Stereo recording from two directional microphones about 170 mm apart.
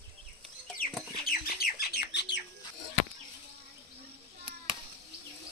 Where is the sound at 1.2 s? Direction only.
65° left (ahead or behind); by 2.4 s 85° left.